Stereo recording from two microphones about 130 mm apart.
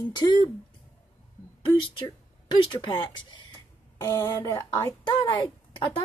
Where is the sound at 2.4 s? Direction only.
35° left (ahead or behind).